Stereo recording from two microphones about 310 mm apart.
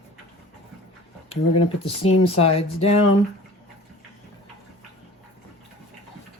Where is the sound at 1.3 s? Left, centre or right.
Centre.